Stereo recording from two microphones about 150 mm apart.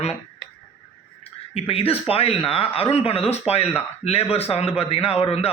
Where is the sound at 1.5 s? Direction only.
40° left (ahead or behind).